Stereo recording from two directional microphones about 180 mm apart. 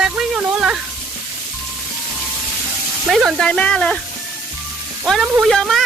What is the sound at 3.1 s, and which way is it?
Speech, centre (ahead or behind).